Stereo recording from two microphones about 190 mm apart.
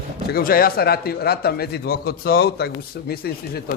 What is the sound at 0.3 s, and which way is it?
A man's voice, 50° left (ahead or behind).